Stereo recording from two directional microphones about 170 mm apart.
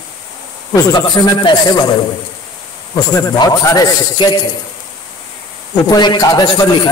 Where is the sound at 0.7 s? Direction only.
25° left (ahead or behind).